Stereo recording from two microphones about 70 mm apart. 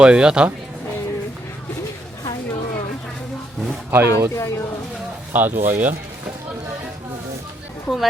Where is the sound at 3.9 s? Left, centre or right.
Right.